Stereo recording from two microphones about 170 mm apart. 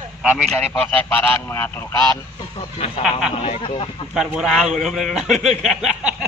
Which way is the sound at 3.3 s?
35° left (ahead or behind).